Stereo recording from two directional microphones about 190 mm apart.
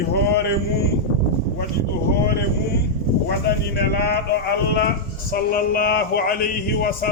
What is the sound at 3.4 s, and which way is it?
Speech, 55° left (ahead or behind).